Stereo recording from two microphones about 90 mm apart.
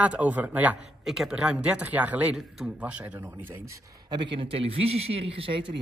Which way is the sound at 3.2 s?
30° right (ahead or behind).